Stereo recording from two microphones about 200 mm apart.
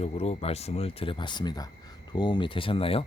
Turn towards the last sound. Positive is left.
turn(degrees=30)  # may be behind; listen again after turning